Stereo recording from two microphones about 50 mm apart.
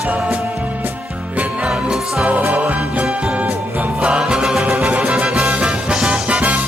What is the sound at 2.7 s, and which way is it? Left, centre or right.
Music, right.